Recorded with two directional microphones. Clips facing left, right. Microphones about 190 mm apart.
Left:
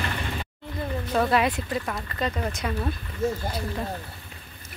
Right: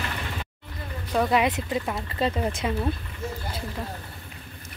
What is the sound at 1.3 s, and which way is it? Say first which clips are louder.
A woman's voice: even; 20° right (ahead or behind).